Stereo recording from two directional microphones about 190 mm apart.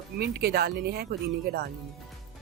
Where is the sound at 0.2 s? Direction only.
55° right (ahead or behind).